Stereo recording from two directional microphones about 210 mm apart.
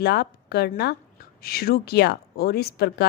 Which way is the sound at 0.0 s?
50° left (ahead or behind).